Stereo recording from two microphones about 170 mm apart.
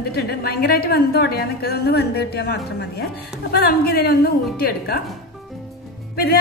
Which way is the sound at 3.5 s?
65° left (ahead or behind).